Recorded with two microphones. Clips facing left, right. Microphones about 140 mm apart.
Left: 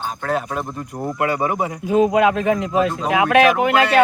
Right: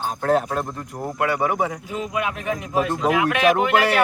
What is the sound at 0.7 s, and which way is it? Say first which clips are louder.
Speech: left 3 dB; 15° left (ahead or behind).